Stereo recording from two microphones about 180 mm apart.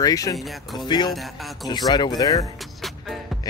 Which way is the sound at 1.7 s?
25° left (ahead or behind).